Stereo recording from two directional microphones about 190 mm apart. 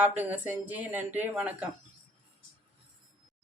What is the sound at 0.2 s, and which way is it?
Speech, 10° right (ahead or behind).